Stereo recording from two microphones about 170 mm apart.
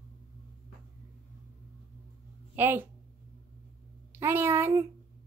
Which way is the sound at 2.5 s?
10° right (ahead or behind).